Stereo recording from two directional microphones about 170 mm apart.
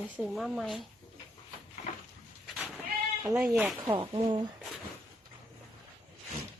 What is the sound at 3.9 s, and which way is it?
Speech, 25° right (ahead or behind).